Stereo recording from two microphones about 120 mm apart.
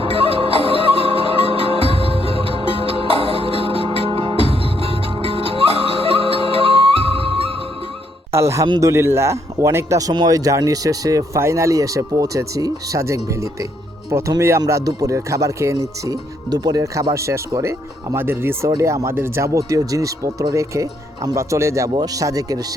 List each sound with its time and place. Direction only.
0.0 s music: 50° right (ahead or behind)
8.3 s speech: 25° right (ahead or behind)